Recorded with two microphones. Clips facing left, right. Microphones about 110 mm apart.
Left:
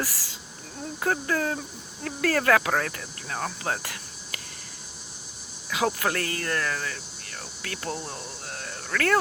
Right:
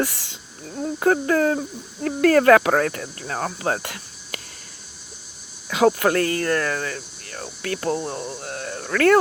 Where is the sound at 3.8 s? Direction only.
30° right (ahead or behind).